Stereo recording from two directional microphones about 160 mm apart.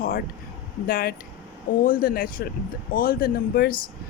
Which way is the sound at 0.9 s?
65° left (ahead or behind).